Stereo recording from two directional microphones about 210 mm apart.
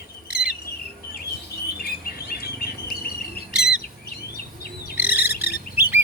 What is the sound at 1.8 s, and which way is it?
Bird, 45° left (ahead or behind).